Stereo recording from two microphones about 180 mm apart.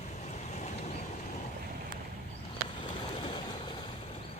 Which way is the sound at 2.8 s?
25° left (ahead or behind).